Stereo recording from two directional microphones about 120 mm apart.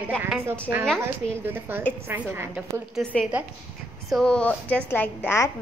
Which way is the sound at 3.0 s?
5° left (ahead or behind).